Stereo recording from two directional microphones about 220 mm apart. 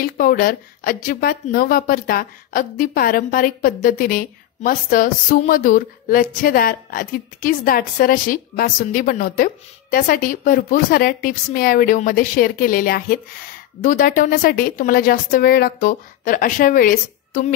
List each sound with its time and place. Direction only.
0.0 s speech: 40° left (ahead or behind)